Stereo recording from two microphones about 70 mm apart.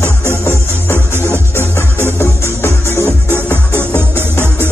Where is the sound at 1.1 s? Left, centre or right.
Right.